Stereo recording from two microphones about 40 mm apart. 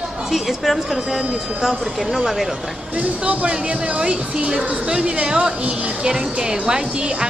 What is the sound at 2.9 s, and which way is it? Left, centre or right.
Speech, right.